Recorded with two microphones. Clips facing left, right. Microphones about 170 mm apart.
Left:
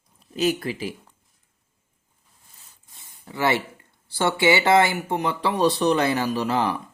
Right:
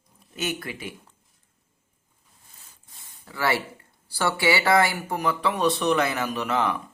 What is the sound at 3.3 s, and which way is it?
Speech, 20° left (ahead or behind).